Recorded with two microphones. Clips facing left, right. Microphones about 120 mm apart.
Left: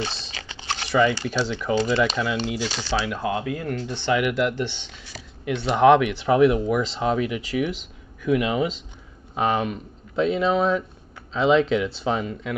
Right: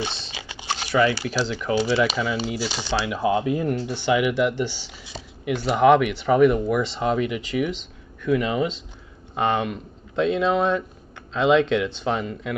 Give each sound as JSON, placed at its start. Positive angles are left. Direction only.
{"t": 0.0, "sound": "speech", "side_deg": 0}
{"t": 0.3, "sound": "a sound", "side_deg": -10}
{"t": 1.5, "sound": "speech", "side_deg": -5}
{"t": 3.3, "sound": "speech", "side_deg": -20}